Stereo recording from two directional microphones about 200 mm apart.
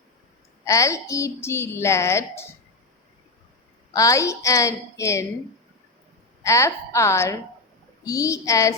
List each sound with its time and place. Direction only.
0.6 s a woman's voice: 15° left (ahead or behind)
3.9 s a woman's voice: 15° left (ahead or behind)
6.4 s a woman's voice: 15° left (ahead or behind)